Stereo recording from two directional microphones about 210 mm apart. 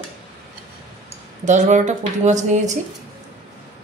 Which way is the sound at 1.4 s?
35° right (ahead or behind).